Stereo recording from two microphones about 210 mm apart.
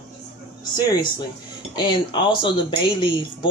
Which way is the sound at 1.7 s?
20° left (ahead or behind).